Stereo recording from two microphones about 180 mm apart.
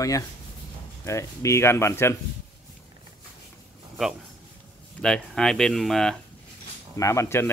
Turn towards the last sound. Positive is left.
turn(degrees=15)  # may be behind; listen again after turning